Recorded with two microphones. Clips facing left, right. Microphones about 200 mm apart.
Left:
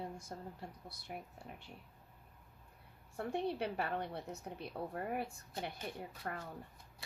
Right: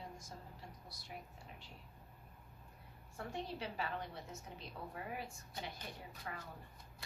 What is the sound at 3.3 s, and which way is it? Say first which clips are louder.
Speech: left 7 dB; 60° left (ahead or behind).